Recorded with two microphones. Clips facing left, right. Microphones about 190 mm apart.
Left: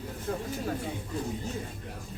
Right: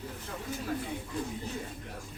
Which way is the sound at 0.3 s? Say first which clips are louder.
Left 10 dB; 45° left (ahead or behind).